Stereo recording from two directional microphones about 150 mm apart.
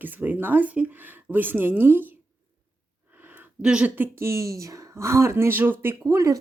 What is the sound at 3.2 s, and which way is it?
Speech, 10° right (ahead or behind).